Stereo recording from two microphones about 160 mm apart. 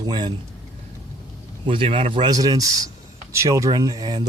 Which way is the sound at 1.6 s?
35° right (ahead or behind).